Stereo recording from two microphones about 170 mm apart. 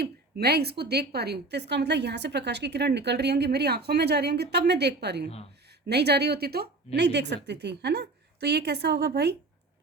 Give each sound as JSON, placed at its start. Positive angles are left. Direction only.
{"t": 0.0, "sound": "a woman's voice", "side_deg": -70}